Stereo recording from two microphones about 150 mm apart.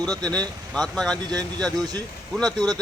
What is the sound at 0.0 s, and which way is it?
Speech, 25° right (ahead or behind).